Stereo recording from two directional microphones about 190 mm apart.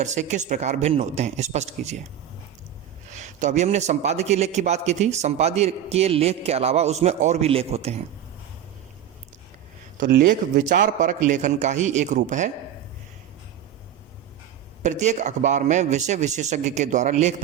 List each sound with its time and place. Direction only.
0.0 s a man's voice: 40° right (ahead or behind)
3.1 s a man's voice: 40° right (ahead or behind)
10.0 s a man's voice: 50° right (ahead or behind)
14.8 s a man's voice: 40° right (ahead or behind)